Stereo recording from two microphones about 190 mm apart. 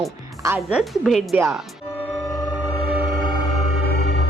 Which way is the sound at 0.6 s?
Centre (ahead or behind).